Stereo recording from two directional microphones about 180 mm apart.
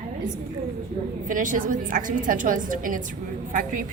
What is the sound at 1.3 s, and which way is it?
A woman's voice, 45° right (ahead or behind).